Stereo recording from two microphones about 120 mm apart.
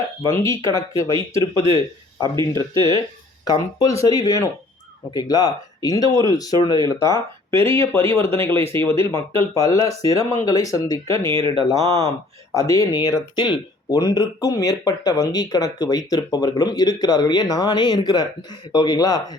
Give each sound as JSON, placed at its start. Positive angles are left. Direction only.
{"t": 0.2, "sound": "speech", "side_deg": 20}
{"t": 2.4, "sound": "speech", "side_deg": 25}
{"t": 11.3, "sound": "speech", "side_deg": -45}
{"t": 11.7, "sound": "speech", "side_deg": 25}